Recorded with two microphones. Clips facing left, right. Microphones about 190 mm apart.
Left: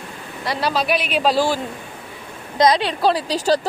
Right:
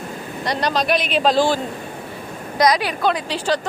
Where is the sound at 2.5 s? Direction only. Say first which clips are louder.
Left 1 dB; 25° left (ahead or behind).